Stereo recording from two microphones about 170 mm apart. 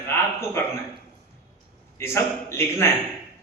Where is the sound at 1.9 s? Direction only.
15° left (ahead or behind).